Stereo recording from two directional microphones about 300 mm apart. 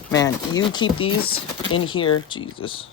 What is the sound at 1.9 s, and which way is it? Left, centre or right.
Speech, centre.